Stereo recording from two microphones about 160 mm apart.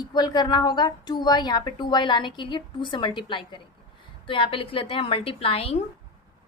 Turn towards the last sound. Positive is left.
turn(degrees=40)  # may be behind; listen again after turning